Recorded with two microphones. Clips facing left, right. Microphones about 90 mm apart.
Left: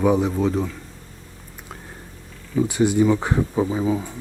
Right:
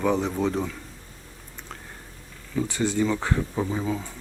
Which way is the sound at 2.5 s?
15° left (ahead or behind).